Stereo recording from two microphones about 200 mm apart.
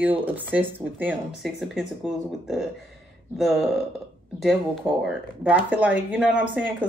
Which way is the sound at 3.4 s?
Centre (ahead or behind).